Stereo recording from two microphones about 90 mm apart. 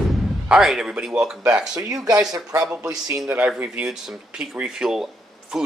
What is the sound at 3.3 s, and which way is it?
A man's voice, 20° right (ahead or behind).